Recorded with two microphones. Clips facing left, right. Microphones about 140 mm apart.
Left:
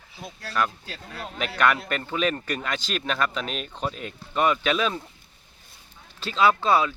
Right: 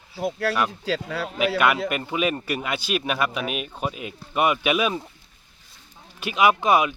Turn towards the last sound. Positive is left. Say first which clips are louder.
# right 2 dB
turn(degrees=-15)  # may be behind; listen again after turning